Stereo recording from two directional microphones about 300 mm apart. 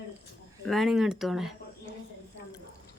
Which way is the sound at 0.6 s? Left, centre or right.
Centre.